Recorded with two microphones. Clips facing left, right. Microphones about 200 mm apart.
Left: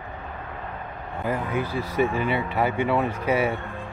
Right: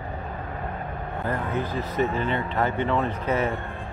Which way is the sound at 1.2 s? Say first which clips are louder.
Left 2 dB; 10° left (ahead or behind).